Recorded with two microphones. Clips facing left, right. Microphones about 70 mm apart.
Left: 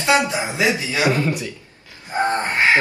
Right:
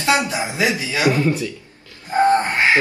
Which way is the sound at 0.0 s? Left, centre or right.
Left.